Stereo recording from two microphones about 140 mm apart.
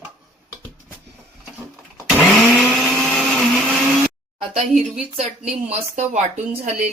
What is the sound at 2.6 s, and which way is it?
Blender, centre (ahead or behind).